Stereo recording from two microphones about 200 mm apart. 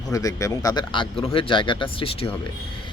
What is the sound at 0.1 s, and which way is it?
Speech, 15° left (ahead or behind).